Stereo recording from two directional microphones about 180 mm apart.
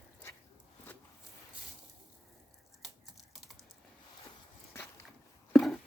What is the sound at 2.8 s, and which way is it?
Typing, centre (ahead or behind).